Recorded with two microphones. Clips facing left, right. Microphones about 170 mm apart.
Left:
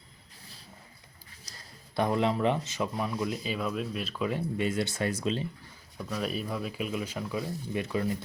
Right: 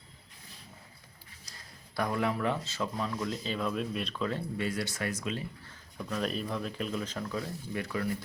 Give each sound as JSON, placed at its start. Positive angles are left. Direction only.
{"t": 1.5, "sound": "a sound", "side_deg": 40}
{"t": 2.0, "sound": "speech", "side_deg": 25}
{"t": 5.6, "sound": "speech", "side_deg": 5}